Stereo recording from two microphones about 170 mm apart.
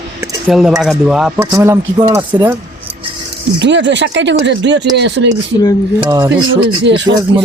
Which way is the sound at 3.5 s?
90° right.